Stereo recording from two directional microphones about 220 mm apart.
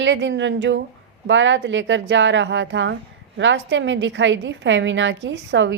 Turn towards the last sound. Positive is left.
turn(degrees=-55)  # may be behind; listen again after turning